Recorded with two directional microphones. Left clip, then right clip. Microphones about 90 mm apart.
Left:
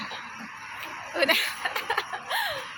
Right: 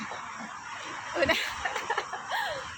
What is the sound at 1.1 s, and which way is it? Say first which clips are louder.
Chuckle: left 3 dB; 15° left (ahead or behind).